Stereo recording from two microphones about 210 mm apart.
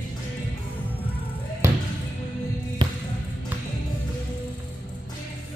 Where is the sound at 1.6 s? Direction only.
10° right (ahead or behind).